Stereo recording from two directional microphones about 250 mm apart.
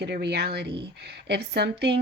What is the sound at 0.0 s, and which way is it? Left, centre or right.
A woman's voice, right.